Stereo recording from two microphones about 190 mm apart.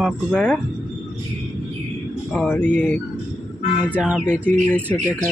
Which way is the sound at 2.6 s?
40° right (ahead or behind).